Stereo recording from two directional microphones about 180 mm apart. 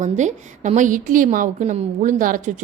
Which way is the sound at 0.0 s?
40° right (ahead or behind).